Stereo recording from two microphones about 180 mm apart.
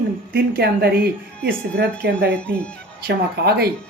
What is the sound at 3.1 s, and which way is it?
Speech, 65° right (ahead or behind).